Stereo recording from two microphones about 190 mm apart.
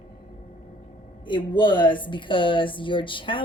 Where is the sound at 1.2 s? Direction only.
25° left (ahead or behind).